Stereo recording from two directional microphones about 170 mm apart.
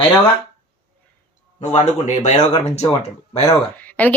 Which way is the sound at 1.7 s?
45° left (ahead or behind).